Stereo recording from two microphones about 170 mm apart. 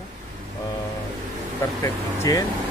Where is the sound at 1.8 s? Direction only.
20° left (ahead or behind).